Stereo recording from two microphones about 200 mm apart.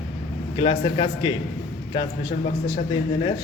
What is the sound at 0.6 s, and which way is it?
Speech, 25° left (ahead or behind).